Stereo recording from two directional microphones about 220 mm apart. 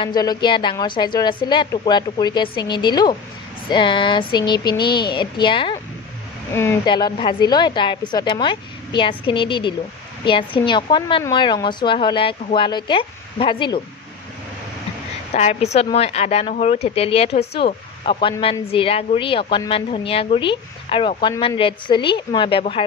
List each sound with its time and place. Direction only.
0.0 s a woman's voice: 20° left (ahead or behind)
6.5 s a woman's voice: 10° left (ahead or behind)
15.3 s a woman's voice: 30° left (ahead or behind)